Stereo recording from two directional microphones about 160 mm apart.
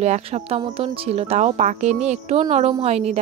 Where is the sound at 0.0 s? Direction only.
40° right (ahead or behind).